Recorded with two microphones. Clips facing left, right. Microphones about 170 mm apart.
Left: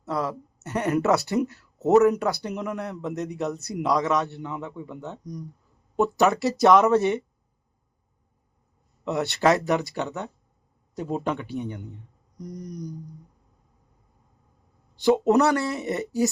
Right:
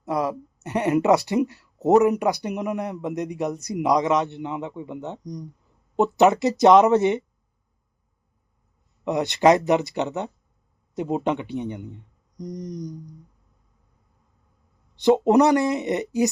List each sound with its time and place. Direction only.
0.0 s speech: 15° right (ahead or behind)
9.0 s speech: 15° right (ahead or behind)
14.9 s speech: 20° right (ahead or behind)